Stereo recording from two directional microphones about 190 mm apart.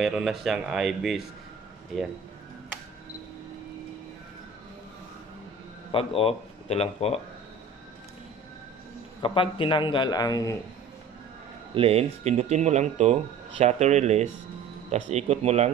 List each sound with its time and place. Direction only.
0.0 s speech: centre (ahead or behind)
5.9 s speech: 30° left (ahead or behind)
9.2 s a man's voice: 25° left (ahead or behind)
11.7 s speech: 30° right (ahead or behind)